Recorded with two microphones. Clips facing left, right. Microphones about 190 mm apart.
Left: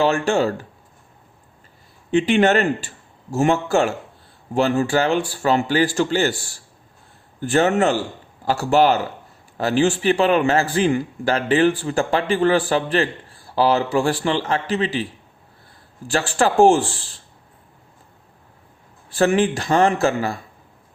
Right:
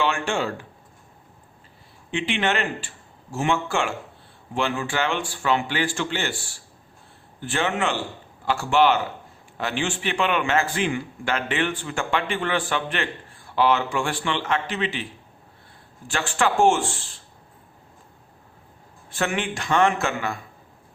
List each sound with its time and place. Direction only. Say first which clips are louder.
0.0 s a man's voice: left 6 dB; 40° left (ahead or behind)
2.0 s a man's voice: left 9 dB; 40° left (ahead or behind)
16.0 s a man's voice: left 4 dB; 35° left (ahead or behind)
19.1 s a man's voice: left 9 dB; 35° left (ahead or behind)